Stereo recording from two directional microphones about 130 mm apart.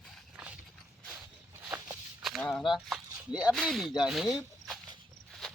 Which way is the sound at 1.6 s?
20° right (ahead or behind).